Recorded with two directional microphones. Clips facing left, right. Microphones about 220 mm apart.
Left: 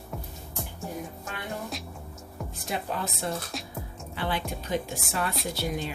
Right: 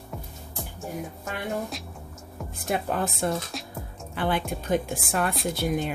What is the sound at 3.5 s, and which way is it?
Music, centre (ahead or behind).